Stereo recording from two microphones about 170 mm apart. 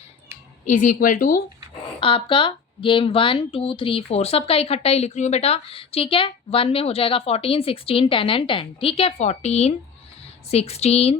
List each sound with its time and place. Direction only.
0.6 s speech: 50° left (ahead or behind)
2.0 s a woman's voice: 30° left (ahead or behind)